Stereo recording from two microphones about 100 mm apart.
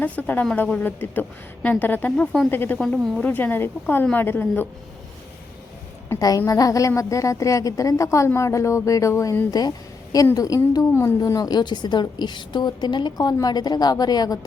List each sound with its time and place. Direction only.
0.0 s speech: 15° left (ahead or behind)
6.1 s a woman's voice: 40° left (ahead or behind)
9.5 s a woman's voice: 40° left (ahead or behind)